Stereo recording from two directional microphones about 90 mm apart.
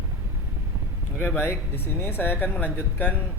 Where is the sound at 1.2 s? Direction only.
25° left (ahead or behind).